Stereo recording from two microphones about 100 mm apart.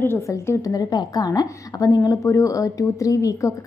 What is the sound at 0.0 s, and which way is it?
A woman's voice, 25° left (ahead or behind).